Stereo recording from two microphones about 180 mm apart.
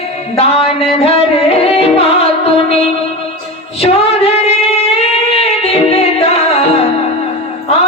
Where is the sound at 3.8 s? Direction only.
35° left (ahead or behind).